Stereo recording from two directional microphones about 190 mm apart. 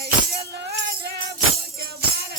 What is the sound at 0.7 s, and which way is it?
Music, 60° right (ahead or behind).